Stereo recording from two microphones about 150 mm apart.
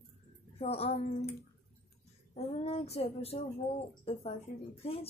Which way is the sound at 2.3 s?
45° left (ahead or behind).